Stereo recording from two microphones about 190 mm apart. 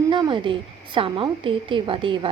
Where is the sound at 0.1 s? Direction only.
25° right (ahead or behind).